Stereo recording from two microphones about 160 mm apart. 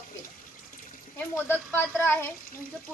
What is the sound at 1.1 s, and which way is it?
Speech, 15° left (ahead or behind).